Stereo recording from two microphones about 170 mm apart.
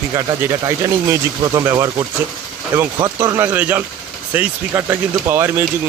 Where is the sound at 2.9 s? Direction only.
20° right (ahead or behind).